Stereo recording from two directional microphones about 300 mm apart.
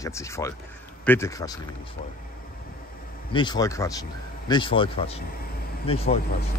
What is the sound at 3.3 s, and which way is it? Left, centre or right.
Speech, centre.